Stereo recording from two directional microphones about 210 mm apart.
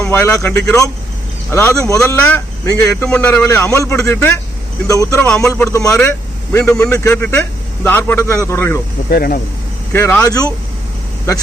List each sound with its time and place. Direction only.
0.0 s speech: 10° left (ahead or behind)
9.0 s speech: 45° left (ahead or behind)
9.9 s speech: 10° left (ahead or behind)